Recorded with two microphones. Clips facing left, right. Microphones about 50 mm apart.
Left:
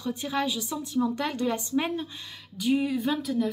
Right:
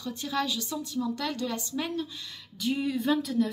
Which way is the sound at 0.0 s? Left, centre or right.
Centre.